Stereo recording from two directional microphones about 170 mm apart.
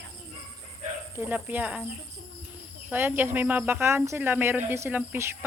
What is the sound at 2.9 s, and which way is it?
Speech, 10° right (ahead or behind).